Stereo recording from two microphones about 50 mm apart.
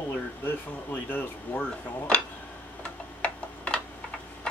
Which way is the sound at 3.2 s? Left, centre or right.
Left.